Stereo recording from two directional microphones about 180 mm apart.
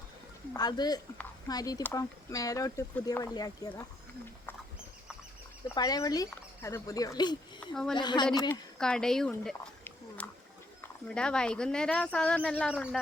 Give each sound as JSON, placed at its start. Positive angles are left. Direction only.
{"t": 0.5, "sound": "speech", "side_deg": 20}
{"t": 5.7, "sound": "speech", "side_deg": 20}
{"t": 7.6, "sound": "speech", "side_deg": 5}
{"t": 7.9, "sound": "speech", "side_deg": 25}
{"t": 8.8, "sound": "speech", "side_deg": 5}